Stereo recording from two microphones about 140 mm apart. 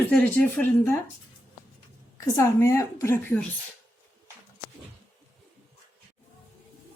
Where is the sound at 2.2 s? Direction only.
20° left (ahead or behind).